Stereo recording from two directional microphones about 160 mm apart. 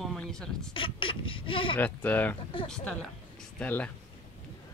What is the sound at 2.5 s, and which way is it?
Speech, 30° left (ahead or behind).